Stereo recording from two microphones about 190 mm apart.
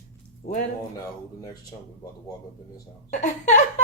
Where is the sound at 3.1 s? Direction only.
40° left (ahead or behind).